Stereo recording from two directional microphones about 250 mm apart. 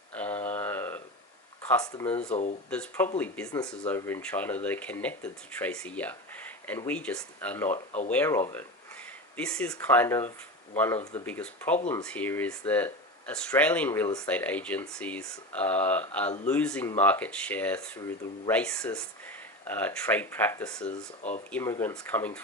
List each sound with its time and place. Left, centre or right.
0.1 s a sound: centre
1.6 s speech: centre
2.6 s speech: centre